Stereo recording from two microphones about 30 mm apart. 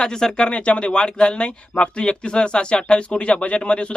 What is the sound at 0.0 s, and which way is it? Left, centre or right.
Speech, left.